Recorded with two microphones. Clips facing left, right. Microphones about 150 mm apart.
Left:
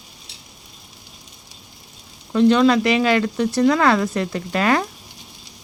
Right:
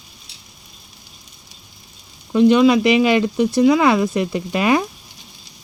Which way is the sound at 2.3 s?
15° right (ahead or behind).